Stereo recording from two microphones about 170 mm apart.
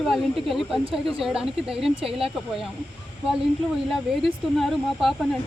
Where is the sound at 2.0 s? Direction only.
35° right (ahead or behind).